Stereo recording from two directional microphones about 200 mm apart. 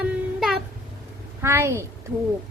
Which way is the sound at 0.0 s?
Centre (ahead or behind).